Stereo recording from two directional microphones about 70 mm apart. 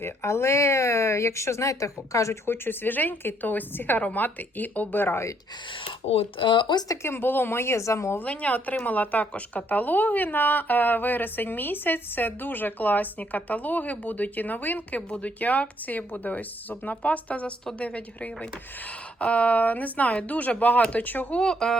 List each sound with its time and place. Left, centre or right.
0.0 s speech: left
2.5 s speech: left
7.0 s speech: left
8.2 s speech: left
21.4 s speech: centre